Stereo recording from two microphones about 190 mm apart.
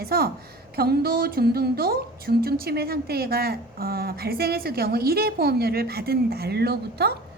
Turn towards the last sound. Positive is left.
turn(degrees=-55)  # may be behind; listen again after turning